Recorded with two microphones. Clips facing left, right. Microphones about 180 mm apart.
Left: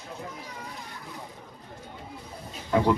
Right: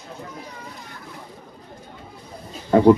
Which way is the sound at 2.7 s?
40° right (ahead or behind).